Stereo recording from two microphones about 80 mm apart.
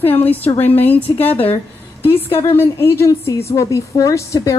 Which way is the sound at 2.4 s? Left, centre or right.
Left.